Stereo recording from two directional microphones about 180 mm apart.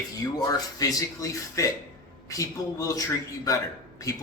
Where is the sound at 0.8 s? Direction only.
20° left (ahead or behind).